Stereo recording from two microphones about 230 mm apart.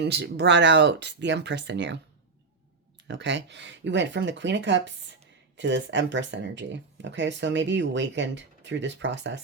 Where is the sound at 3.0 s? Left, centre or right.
Right.